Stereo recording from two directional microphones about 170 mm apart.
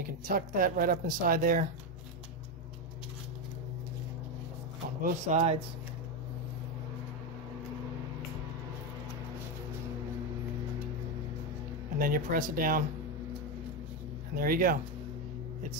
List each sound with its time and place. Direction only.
0.3 s speech: 60° right (ahead or behind)
5.0 s speech: 40° right (ahead or behind)
12.0 s speech: 55° right (ahead or behind)
14.3 s speech: 55° right (ahead or behind)